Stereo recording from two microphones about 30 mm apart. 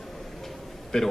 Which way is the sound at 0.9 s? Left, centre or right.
Centre.